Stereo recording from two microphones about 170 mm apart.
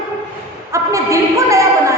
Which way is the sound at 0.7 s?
20° right (ahead or behind).